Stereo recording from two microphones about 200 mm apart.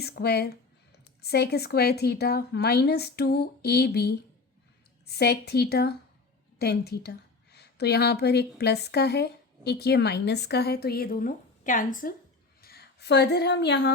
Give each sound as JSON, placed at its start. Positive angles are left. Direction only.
{"t": 0.0, "sound": "a woman's voice", "side_deg": 55}
{"t": 12.6, "sound": "a woman's voice", "side_deg": 50}